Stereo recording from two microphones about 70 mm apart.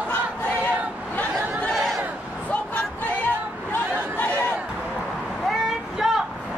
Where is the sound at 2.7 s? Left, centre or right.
Left.